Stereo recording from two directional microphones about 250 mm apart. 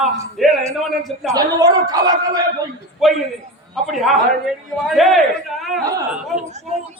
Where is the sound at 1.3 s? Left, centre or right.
Centre.